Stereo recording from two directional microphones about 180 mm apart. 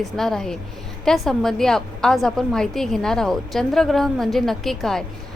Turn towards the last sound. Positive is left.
turn(degrees=0)  # may be behind; listen again after turning